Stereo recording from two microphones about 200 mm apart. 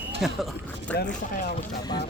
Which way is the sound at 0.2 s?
Centre (ahead or behind).